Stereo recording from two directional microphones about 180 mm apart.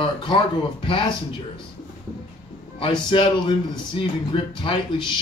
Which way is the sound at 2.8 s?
30° left (ahead or behind).